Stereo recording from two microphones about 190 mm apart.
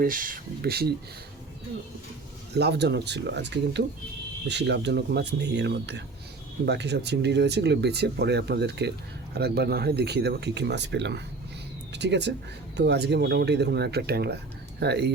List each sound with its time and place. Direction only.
0.0 s speech: 45° right (ahead or behind)
2.6 s speech: 60° right (ahead or behind)